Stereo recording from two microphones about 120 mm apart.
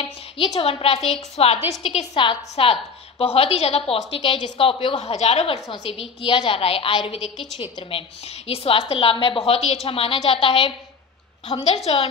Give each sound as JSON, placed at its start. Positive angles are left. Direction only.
{"t": 0.6, "sound": "a woman's voice", "side_deg": 50}
{"t": 8.5, "sound": "a woman's voice", "side_deg": 55}
{"t": 11.4, "sound": "a woman's voice", "side_deg": 60}